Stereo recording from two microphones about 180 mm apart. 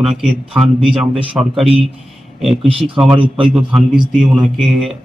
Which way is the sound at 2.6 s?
30° right (ahead or behind).